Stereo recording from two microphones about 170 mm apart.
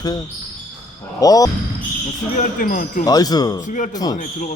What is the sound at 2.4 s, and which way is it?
Speech, 50° left (ahead or behind).